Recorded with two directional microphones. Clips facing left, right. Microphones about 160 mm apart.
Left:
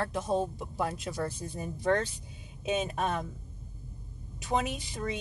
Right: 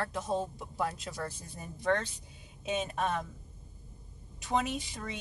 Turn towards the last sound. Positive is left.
turn(degrees=10)  # may be behind; listen again after turning